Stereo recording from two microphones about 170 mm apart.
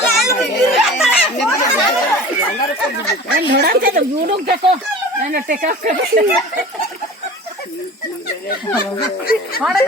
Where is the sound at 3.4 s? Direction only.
65° right (ahead or behind).